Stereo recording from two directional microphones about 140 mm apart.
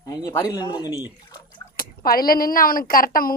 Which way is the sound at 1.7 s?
85° left.